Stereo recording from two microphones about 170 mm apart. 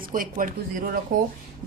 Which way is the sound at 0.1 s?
55° right (ahead or behind).